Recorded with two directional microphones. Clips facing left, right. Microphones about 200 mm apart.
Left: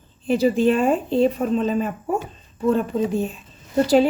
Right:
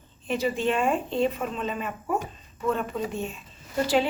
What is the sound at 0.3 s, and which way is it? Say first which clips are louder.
A woman's voice: left 8 dB; 35° left (ahead or behind).